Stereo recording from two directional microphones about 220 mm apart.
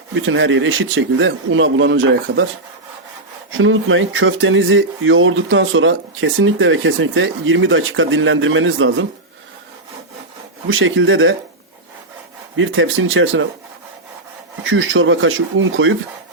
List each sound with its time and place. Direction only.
0.1 s speech: 60° right (ahead or behind)
3.6 s speech: 65° right (ahead or behind)
10.7 s speech: 60° right (ahead or behind)
12.5 s speech: 65° right (ahead or behind)
14.6 s speech: 65° right (ahead or behind)